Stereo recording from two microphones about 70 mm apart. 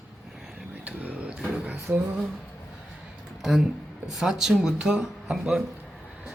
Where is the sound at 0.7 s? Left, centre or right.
Right.